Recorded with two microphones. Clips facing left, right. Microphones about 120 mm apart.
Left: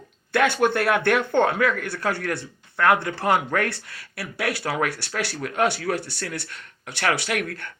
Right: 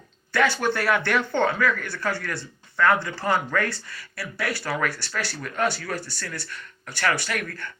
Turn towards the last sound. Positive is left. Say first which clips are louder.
# left 3 dB
turn(degrees=60)  # may be behind; listen again after turning